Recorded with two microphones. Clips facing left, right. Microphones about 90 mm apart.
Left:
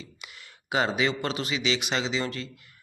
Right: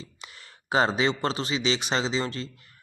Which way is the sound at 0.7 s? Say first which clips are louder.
Right 2 dB; 35° right (ahead or behind).